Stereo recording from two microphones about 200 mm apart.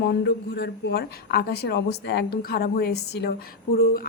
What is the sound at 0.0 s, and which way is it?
Speech, 55° left (ahead or behind).